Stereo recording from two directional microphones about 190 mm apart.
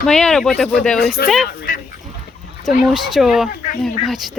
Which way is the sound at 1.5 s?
45° left (ahead or behind).